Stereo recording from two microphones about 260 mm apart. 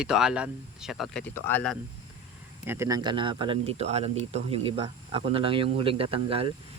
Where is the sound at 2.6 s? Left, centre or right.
Centre.